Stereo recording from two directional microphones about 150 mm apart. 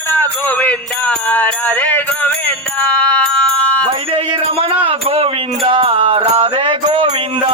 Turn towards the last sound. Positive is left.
turn(degrees=-35)  # may be behind; listen again after turning